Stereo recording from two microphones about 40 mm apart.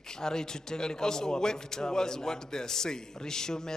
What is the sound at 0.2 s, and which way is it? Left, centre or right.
A man's voice, centre.